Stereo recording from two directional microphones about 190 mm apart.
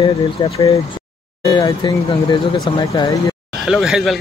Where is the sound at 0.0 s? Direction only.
30° left (ahead or behind).